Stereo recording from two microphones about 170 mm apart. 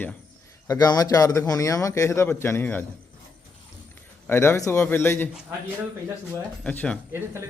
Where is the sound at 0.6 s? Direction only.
20° left (ahead or behind).